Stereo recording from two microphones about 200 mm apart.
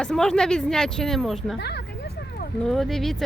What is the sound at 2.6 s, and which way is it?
Speech, centre (ahead or behind).